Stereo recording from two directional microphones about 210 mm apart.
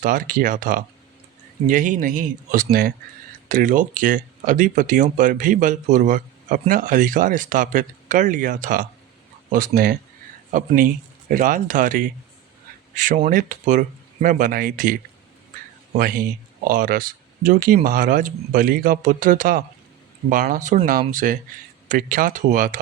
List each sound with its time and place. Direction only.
0.0 s speech: 40° right (ahead or behind)
16.0 s speech: 40° right (ahead or behind)